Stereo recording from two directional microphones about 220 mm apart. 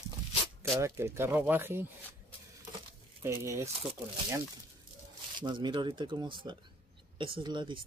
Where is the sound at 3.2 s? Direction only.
10° right (ahead or behind).